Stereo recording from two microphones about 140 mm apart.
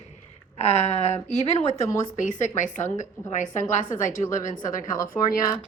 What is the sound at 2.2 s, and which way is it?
A woman's voice, 65° left (ahead or behind).